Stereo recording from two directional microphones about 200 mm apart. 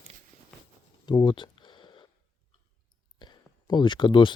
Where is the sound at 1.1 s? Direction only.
25° left (ahead or behind).